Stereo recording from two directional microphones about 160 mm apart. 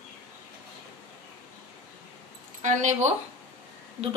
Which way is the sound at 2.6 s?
50° right (ahead or behind).